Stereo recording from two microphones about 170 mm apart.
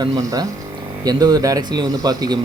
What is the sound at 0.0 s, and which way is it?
Speech, 20° right (ahead or behind).